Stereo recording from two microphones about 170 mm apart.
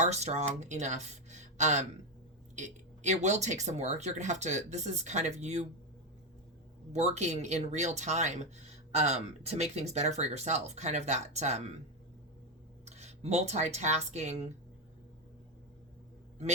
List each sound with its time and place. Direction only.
0.0 s speech: 40° right (ahead or behind)
6.9 s speech: 40° right (ahead or behind)
12.8 s speech: 40° right (ahead or behind)